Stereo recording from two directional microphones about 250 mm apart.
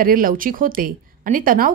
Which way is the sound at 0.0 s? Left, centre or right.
Right.